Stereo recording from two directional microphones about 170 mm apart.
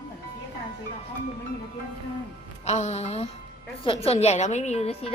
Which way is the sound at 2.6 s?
40° left (ahead or behind).